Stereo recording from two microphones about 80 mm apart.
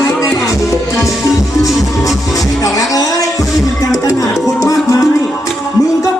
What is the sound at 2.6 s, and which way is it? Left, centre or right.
Speech, left.